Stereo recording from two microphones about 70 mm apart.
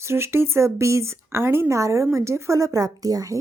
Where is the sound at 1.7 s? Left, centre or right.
Right.